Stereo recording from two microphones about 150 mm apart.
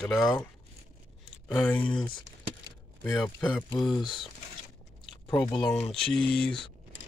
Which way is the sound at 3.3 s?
15° left (ahead or behind).